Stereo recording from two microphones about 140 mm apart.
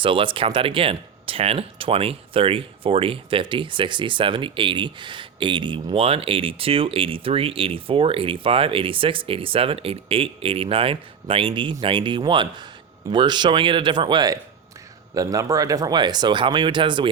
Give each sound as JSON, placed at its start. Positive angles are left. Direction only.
{"t": 0.0, "sound": "speech", "side_deg": -40}